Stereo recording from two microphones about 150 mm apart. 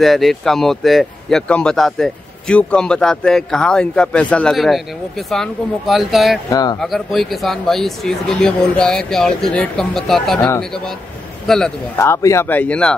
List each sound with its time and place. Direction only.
0.0 s speech: centre (ahead or behind)
6.5 s speech: 25° left (ahead or behind)
6.8 s speech: centre (ahead or behind)
12.0 s speech: 20° left (ahead or behind)